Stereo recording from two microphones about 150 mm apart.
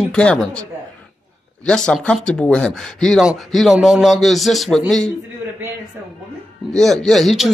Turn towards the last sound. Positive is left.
turn(degrees=0)  # may be behind; listen again after turning